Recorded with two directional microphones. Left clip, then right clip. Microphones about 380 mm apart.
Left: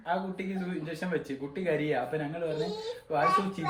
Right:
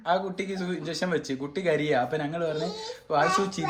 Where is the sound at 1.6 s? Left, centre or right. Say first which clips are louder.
Right 5 dB; centre.